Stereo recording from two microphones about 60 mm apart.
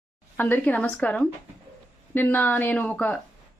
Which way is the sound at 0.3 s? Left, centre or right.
Left.